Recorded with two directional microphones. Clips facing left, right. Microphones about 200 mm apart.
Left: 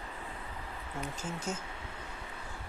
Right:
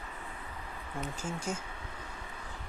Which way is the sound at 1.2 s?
10° right (ahead or behind).